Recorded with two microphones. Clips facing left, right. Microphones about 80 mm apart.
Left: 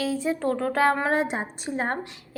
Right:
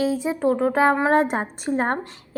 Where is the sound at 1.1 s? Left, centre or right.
Right.